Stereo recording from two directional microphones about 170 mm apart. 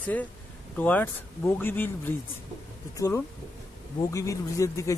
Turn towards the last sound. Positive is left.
turn(degrees=20)  # may be behind; listen again after turning